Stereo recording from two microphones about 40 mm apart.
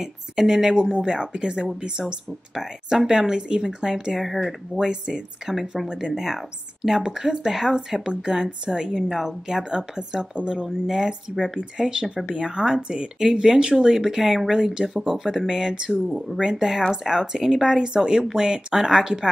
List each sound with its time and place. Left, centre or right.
0.0 s a woman's voice: centre
5.9 s a woman's voice: centre
14.0 s a woman's voice: centre